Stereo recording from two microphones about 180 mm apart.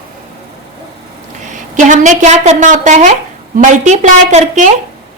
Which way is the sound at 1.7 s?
45° right (ahead or behind).